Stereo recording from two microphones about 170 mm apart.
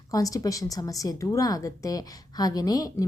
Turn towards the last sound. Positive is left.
turn(degrees=20)  # may be behind; listen again after turning